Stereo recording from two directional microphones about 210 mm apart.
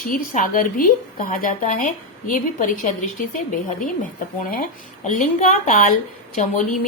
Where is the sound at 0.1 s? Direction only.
40° left (ahead or behind).